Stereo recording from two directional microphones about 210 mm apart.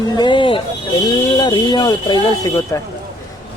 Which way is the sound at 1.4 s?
20° left (ahead or behind).